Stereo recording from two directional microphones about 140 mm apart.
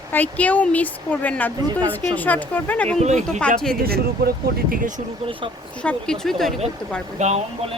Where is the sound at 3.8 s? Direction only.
90° right.